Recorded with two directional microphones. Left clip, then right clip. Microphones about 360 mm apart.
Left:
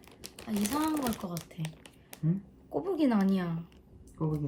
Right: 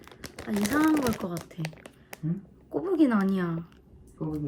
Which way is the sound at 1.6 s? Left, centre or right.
Centre.